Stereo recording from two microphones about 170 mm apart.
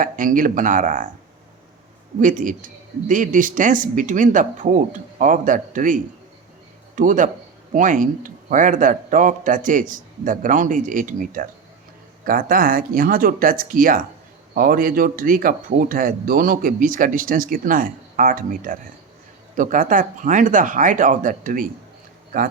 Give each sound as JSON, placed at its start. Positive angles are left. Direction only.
{"t": 0.0, "sound": "a man's voice", "side_deg": -50}
{"t": 2.2, "sound": "a man's voice", "side_deg": -50}